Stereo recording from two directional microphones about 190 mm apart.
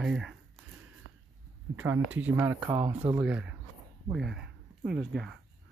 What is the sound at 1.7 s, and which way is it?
Speech, 10° right (ahead or behind).